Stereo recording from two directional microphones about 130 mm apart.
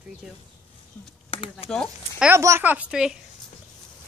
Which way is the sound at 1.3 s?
45° left (ahead or behind).